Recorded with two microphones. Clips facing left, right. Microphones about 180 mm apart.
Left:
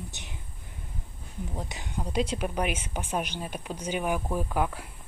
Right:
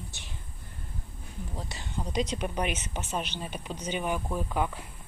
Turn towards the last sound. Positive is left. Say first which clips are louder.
# left 2 dB
turn(degrees=10)  # may be behind; listen again after turning